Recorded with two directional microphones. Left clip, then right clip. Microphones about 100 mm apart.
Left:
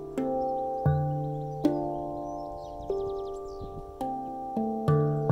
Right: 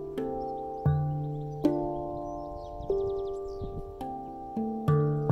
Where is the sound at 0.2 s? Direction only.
Centre (ahead or behind).